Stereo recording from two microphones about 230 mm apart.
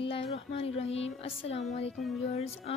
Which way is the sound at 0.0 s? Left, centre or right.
Left.